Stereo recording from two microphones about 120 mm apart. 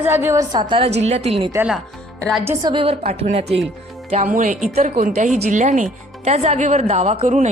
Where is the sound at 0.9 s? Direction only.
65° right (ahead or behind).